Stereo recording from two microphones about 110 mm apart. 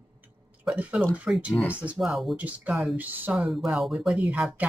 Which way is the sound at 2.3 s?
15° right (ahead or behind).